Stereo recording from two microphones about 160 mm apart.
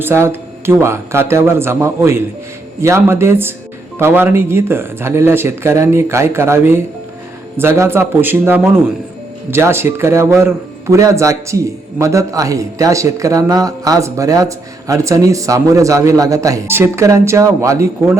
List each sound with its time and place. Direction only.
0.0 s a man's voice: 15° right (ahead or behind)